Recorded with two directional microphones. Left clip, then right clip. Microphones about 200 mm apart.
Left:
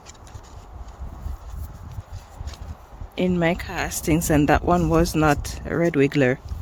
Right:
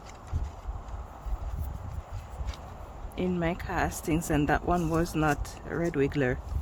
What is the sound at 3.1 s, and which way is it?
Speech, 40° left (ahead or behind).